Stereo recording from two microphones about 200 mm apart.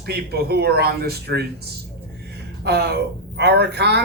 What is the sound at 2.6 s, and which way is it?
A man's voice, 55° right (ahead or behind).